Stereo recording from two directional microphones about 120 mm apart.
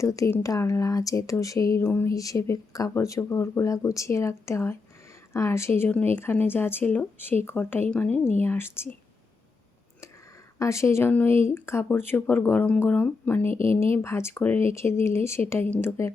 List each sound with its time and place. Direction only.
0.0 s a woman's voice: 25° left (ahead or behind)
10.6 s speech: 25° left (ahead or behind)
13.5 s speech: 50° right (ahead or behind)
13.9 s speech: 20° left (ahead or behind)